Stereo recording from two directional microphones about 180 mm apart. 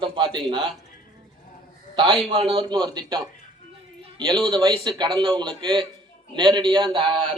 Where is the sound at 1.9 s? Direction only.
25° right (ahead or behind).